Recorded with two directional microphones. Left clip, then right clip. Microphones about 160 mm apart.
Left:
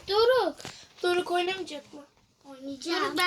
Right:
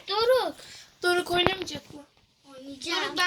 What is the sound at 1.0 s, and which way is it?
Speech, 40° right (ahead or behind).